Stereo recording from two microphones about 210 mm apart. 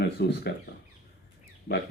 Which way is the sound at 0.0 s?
50° left (ahead or behind).